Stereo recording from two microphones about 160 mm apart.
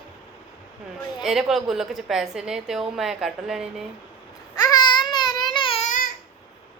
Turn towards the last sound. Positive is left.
turn(degrees=55)  # may be behind; listen again after turning